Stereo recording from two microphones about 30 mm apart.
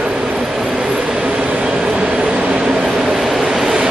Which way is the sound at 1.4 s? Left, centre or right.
Right.